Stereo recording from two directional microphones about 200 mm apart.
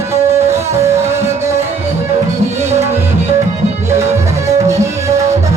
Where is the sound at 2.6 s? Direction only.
15° right (ahead or behind).